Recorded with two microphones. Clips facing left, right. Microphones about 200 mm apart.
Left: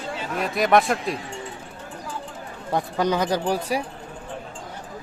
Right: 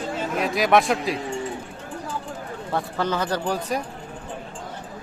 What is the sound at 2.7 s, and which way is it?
Speech, 15° left (ahead or behind).